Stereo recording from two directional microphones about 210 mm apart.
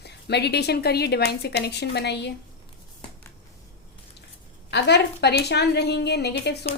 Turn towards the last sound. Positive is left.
turn(degrees=50)  # may be behind; listen again after turning